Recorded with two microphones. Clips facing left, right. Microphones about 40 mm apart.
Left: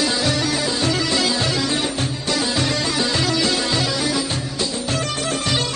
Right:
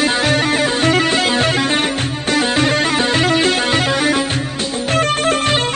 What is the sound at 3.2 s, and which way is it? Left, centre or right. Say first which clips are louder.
Music: right 6 dB; right.